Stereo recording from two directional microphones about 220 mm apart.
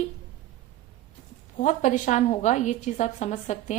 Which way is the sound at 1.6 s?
35° left (ahead or behind).